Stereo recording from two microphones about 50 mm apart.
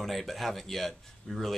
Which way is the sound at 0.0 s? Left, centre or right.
Centre.